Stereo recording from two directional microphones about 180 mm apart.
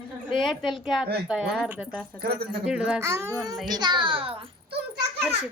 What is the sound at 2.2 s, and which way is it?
Speech, 60° right (ahead or behind).